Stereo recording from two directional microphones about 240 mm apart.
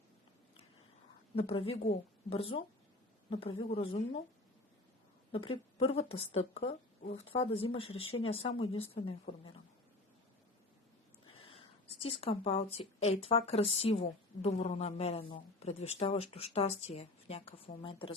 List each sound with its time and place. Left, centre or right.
1.4 s speech: left
5.3 s speech: left
11.3 s speech: left